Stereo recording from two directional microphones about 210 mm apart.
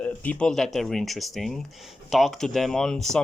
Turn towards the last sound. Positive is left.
turn(degrees=5)  # may be behind; listen again after turning